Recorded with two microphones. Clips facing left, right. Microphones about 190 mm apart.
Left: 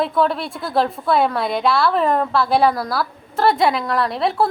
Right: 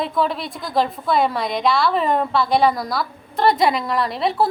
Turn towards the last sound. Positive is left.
turn(degrees=0)  # may be behind; listen again after turning